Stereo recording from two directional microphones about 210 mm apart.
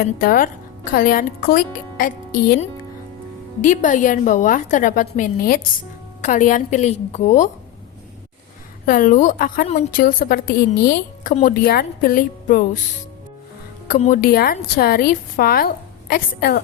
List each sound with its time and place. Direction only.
0.0 s a woman's voice: 45° left (ahead or behind)
8.9 s a woman's voice: 40° left (ahead or behind)
13.8 s a woman's voice: 40° left (ahead or behind)